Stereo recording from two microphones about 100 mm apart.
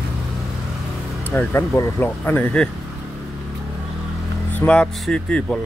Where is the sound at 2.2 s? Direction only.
15° left (ahead or behind).